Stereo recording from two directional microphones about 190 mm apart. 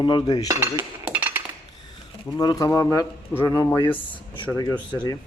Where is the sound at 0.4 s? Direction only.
15° right (ahead or behind).